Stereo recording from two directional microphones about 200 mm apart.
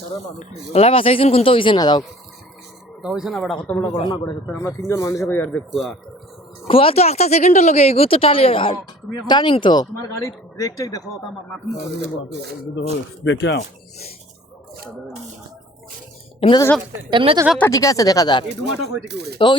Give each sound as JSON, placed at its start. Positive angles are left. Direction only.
{"t": 0.7, "sound": "speech", "side_deg": 30}
{"t": 3.0, "sound": "speech", "side_deg": 0}
{"t": 3.9, "sound": "speech", "side_deg": 25}
{"t": 6.7, "sound": "speech", "side_deg": 30}
{"t": 11.9, "sound": "speech", "side_deg": -60}
{"t": 13.2, "sound": "speech", "side_deg": 60}
{"t": 16.4, "sound": "speech", "side_deg": 25}
{"t": 17.1, "sound": "speech", "side_deg": -25}
{"t": 17.6, "sound": "speech", "side_deg": 15}
{"t": 18.4, "sound": "speech", "side_deg": -60}